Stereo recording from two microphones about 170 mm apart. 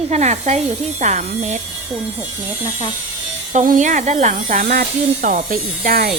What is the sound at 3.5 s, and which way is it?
Speech, 45° right (ahead or behind).